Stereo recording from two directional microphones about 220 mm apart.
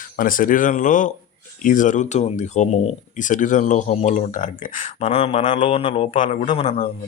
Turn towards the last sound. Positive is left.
turn(degrees=25)  # may be behind; listen again after turning